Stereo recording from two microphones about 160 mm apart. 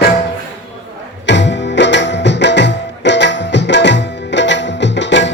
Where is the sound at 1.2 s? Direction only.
90° left.